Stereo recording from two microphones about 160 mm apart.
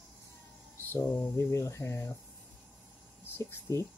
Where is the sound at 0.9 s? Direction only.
15° left (ahead or behind).